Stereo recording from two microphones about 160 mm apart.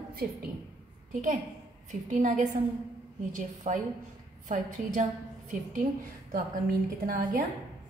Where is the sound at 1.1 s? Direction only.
55° right (ahead or behind).